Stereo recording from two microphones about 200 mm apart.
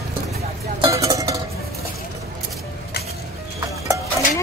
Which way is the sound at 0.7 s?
20° right (ahead or behind).